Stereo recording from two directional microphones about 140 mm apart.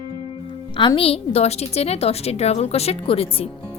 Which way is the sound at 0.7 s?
40° left (ahead or behind).